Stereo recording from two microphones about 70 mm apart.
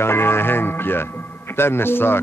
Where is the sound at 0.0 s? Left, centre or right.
Left.